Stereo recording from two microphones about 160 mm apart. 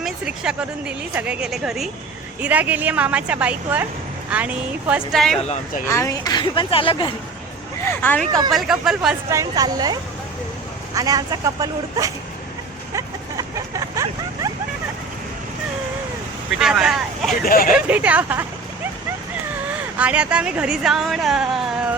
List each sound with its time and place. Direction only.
0.0 s a woman's voice: 5° right (ahead or behind)
5.8 s speech: 20° left (ahead or behind); by 7.1 s 35° left (ahead or behind)
7.9 s speech: 10° left (ahead or behind)
8.4 s a woman's voice: centre (ahead or behind)
9.3 s speech: 20° right (ahead or behind)
12.9 s vehicle: 20° right (ahead or behind)
16.6 s a woman's voice: 5° right (ahead or behind)
17.4 s speech: 65° left (ahead or behind)
17.7 s speech: 10° right (ahead or behind)
20.0 s a woman's voice: 10° right (ahead or behind)